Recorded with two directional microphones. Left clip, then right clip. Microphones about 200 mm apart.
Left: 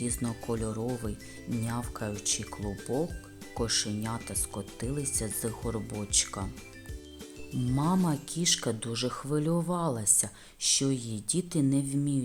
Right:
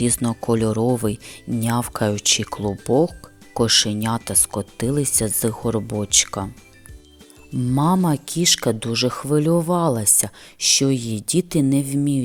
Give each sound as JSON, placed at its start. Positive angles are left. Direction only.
{"t": 0.0, "sound": "speech", "side_deg": -40}
{"t": 7.8, "sound": "speech", "side_deg": -40}